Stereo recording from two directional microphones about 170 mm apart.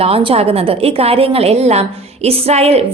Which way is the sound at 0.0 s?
35° right (ahead or behind).